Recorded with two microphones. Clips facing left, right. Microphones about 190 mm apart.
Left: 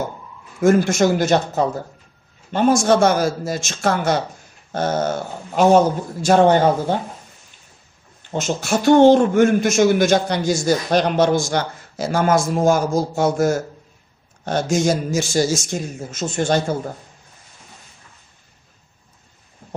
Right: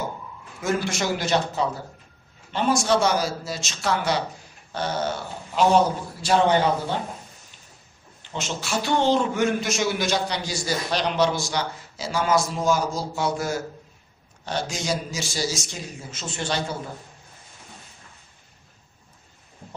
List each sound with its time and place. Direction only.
0.6 s a man's voice: 50° left (ahead or behind)
8.2 s a man's voice: 45° left (ahead or behind)